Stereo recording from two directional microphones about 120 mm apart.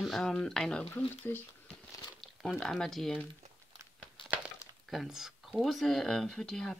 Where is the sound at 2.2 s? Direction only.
Centre (ahead or behind).